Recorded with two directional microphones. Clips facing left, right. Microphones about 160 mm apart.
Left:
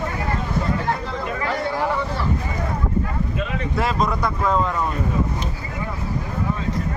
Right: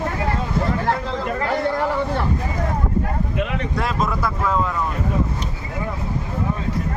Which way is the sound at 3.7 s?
Centre (ahead or behind).